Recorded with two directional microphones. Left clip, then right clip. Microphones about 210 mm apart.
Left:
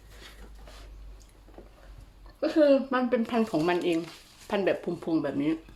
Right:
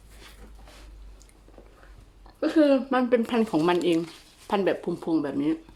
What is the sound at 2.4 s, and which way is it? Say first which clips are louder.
Speech: right 1 dB; 25° right (ahead or behind).